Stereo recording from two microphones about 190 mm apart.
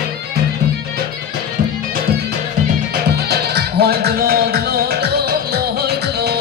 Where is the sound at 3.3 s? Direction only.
55° right (ahead or behind).